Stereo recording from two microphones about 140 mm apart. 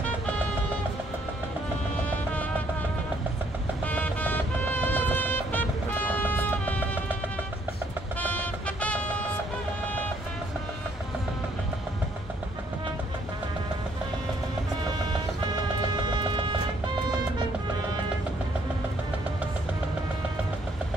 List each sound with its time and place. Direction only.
3.8 s music: 10° left (ahead or behind)
8.2 s music: 10° left (ahead or behind)
15.9 s music: 30° right (ahead or behind)